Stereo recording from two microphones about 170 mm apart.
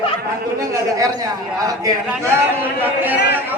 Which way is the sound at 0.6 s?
20° right (ahead or behind).